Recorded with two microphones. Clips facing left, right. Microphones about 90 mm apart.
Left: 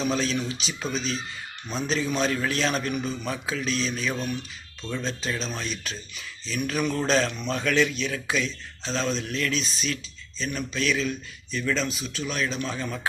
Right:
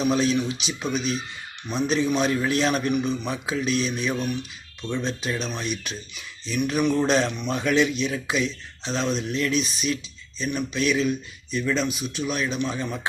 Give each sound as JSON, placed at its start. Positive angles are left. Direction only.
{"t": 0.0, "sound": "a man's voice", "side_deg": -15}